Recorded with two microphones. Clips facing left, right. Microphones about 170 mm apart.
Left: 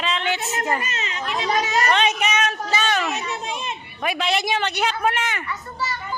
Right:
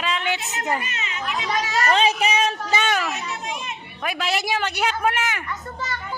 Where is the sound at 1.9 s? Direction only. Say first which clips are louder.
Right 1 dB; 30° right (ahead or behind).